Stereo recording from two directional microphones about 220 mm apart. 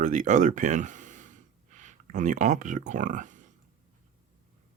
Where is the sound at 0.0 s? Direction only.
35° right (ahead or behind).